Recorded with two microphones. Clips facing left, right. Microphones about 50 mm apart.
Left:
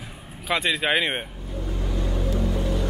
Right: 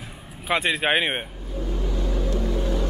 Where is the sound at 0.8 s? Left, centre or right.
Centre.